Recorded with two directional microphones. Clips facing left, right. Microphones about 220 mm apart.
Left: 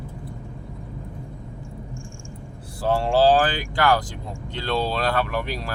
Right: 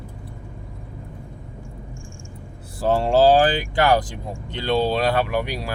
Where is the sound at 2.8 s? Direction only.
40° right (ahead or behind).